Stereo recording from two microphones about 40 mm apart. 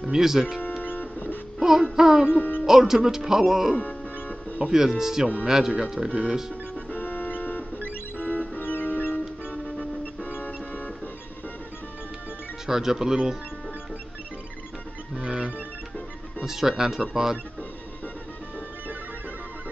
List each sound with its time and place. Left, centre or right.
0.1 s speech: centre
0.8 s music: left
1.6 s speech: centre
2.3 s music: left
2.6 s speech: centre
3.7 s music: left
4.7 s speech: centre
6.5 s music: left
10.4 s music: left
12.6 s speech: centre
15.1 s music: right
16.4 s speech: centre